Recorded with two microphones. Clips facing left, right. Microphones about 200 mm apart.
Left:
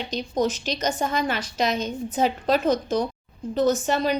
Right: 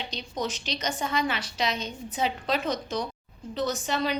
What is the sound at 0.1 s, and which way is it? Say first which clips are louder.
A woman's voice: left 11 dB; 45° left (ahead or behind).